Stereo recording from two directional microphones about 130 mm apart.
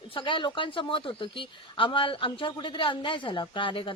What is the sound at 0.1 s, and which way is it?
A woman's voice, 40° left (ahead or behind).